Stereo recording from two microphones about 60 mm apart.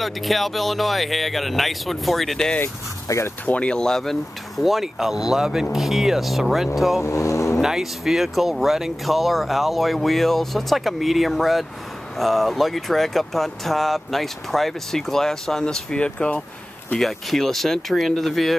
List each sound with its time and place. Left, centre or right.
0.0 s speech: centre
3.1 s speech: left
3.4 s speech: centre
7.0 s speech: left
7.6 s speech: centre
17.0 s speech: centre